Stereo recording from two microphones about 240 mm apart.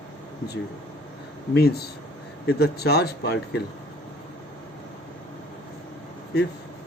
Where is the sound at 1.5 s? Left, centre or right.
Left.